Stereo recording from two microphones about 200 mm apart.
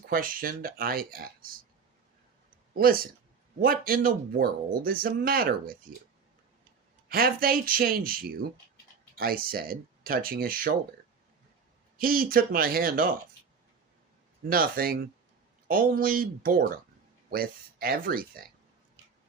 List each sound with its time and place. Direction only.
0.1 s speech: 45° right (ahead or behind)
2.7 s speech: 50° right (ahead or behind)
7.1 s speech: 50° right (ahead or behind)
11.9 s speech: 45° right (ahead or behind)
14.5 s speech: 45° right (ahead or behind)